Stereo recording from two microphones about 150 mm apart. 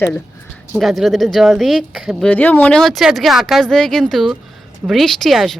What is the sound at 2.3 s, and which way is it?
Speech, 10° left (ahead or behind).